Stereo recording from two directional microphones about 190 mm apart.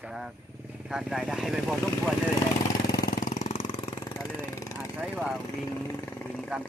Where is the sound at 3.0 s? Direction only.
50° left (ahead or behind); by 4.9 s 15° left (ahead or behind).